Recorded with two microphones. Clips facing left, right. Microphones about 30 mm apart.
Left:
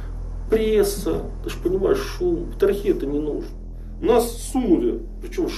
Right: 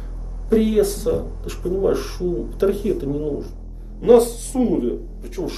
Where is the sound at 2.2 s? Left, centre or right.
Centre.